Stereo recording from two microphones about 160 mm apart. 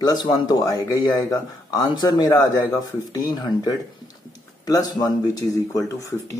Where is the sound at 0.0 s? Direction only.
25° left (ahead or behind).